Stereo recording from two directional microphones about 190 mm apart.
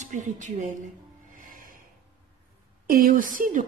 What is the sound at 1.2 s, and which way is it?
Music, 45° right (ahead or behind).